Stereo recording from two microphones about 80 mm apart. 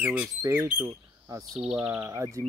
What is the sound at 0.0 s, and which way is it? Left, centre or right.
Speech, right.